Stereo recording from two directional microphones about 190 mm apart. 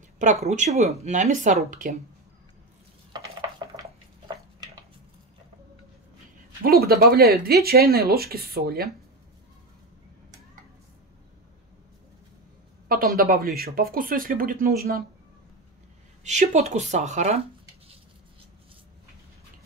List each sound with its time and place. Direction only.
0.2 s speech: 40° right (ahead or behind)
3.1 s stir: 20° right (ahead or behind)
6.6 s speech: 55° right (ahead or behind)
12.8 s speech: 50° right (ahead or behind)
16.3 s speech: 35° right (ahead or behind)